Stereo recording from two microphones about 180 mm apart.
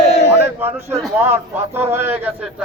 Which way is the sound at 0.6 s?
10° right (ahead or behind).